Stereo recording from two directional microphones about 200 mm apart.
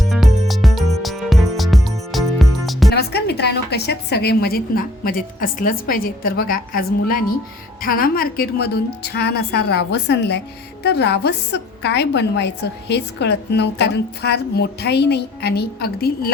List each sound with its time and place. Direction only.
0.0 s music: centre (ahead or behind)
2.9 s a woman's voice: 55° left (ahead or behind)